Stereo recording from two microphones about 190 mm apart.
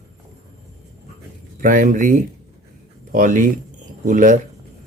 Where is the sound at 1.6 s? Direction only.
45° right (ahead or behind).